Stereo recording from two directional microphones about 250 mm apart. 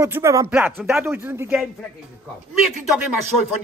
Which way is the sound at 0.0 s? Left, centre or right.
Centre.